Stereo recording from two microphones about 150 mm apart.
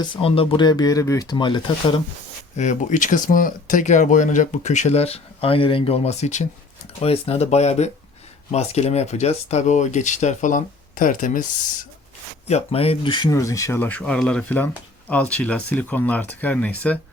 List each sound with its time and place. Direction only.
0.0 s speech: 35° left (ahead or behind)
2.6 s speech: 55° left (ahead or behind)
12.5 s speech: 45° left (ahead or behind)
13.3 s speech: 20° left (ahead or behind)